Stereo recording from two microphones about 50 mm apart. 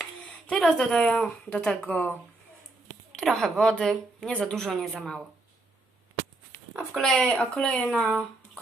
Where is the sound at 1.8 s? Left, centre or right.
Left.